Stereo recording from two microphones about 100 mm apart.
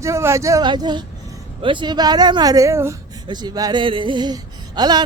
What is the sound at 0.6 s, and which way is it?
Speech, 45° right (ahead or behind).